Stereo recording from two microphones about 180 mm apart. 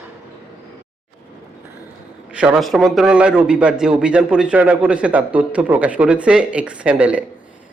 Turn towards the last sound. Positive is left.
turn(degrees=-5)  # may be behind; listen again after turning